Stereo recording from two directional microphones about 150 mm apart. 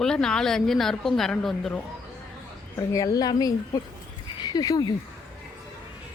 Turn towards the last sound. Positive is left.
turn(degrees=25)  # may be behind; listen again after turning